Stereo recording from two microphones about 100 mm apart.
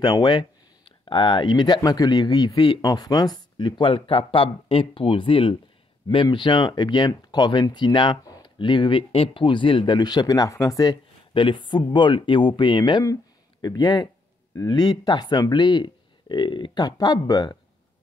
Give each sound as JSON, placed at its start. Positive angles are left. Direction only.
{"t": 0.0, "sound": "speech", "side_deg": 45}
{"t": 6.0, "sound": "speech", "side_deg": 45}
{"t": 11.3, "sound": "speech", "side_deg": 55}